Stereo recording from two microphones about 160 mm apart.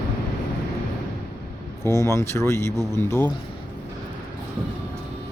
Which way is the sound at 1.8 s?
20° left (ahead or behind).